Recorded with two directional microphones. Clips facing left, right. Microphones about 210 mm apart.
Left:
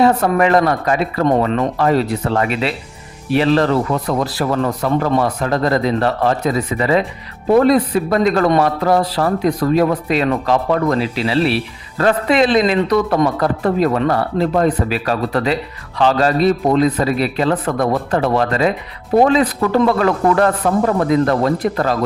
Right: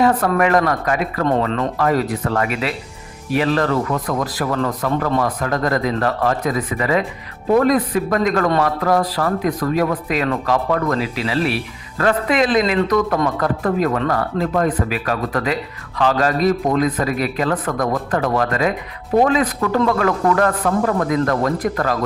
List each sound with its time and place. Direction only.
0.0 s a man's voice: 30° left (ahead or behind)
1.3 s speech: 15° left (ahead or behind)
1.8 s a man's voice: 25° left (ahead or behind)